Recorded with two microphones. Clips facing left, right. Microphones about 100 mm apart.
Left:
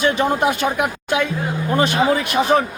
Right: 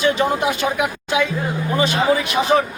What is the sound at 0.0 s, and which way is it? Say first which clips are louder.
Speech: left 1 dB; 50° left (ahead or behind).